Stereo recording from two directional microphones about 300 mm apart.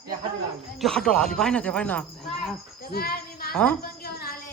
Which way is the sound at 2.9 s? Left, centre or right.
Left.